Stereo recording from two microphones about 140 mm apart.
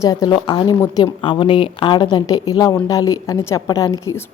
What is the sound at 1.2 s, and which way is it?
Speech, 35° left (ahead or behind).